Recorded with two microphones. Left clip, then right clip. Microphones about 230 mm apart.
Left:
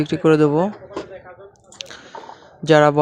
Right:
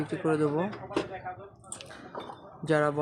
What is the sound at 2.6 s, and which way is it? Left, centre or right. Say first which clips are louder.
Speech: left 13 dB; left.